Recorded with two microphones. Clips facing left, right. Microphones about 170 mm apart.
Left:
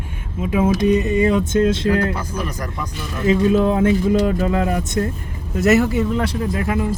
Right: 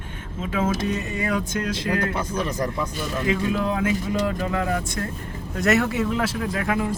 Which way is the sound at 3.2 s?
25° left (ahead or behind).